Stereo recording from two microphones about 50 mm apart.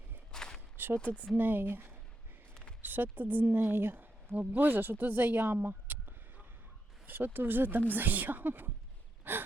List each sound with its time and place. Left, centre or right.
0.3 s a sound: centre
0.9 s speech: left
1.4 s a woman's voice: right
9.3 s gasp: right